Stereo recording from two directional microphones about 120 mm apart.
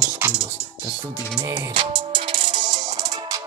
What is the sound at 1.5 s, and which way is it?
Music, 40° right (ahead or behind).